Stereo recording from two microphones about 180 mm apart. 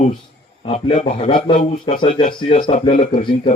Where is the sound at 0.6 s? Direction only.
35° left (ahead or behind).